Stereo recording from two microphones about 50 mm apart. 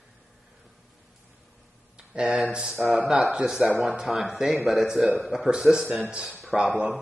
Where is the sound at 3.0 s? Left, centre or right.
Centre.